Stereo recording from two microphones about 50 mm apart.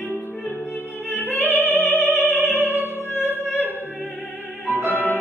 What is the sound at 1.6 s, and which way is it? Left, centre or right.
Opera, left.